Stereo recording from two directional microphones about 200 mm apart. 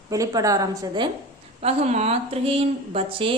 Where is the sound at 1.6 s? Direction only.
30° right (ahead or behind).